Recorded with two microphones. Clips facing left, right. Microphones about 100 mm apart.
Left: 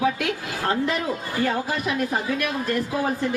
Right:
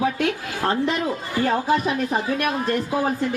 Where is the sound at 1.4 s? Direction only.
30° right (ahead or behind).